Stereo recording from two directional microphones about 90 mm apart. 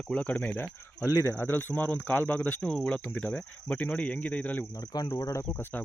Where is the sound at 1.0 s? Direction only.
30° left (ahead or behind).